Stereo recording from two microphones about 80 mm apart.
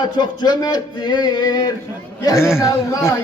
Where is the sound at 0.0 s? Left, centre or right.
Left.